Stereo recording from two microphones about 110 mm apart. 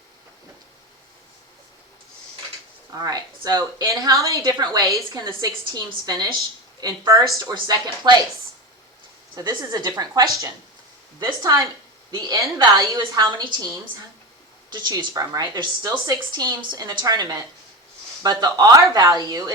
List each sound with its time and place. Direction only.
2.9 s a woman's voice: 35° right (ahead or behind)
6.8 s a woman's voice: 30° right (ahead or behind)
7.5 s a woman's voice: 40° right (ahead or behind)
9.3 s a woman's voice: 40° right (ahead or behind)
14.7 s a woman's voice: 40° right (ahead or behind)